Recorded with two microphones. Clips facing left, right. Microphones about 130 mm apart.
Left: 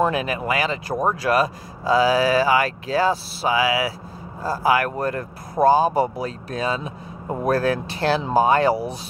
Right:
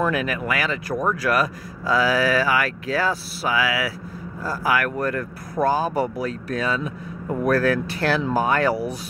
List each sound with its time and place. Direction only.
0.0 s speech: 25° left (ahead or behind)